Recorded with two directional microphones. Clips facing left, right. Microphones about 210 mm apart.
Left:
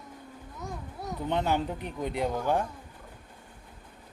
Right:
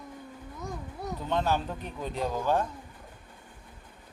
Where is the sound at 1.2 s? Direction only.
15° left (ahead or behind).